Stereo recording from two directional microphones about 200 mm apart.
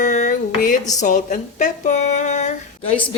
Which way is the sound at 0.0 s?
40° left (ahead or behind).